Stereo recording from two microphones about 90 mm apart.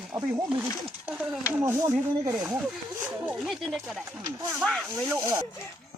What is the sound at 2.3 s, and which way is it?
Speech, 15° right (ahead or behind).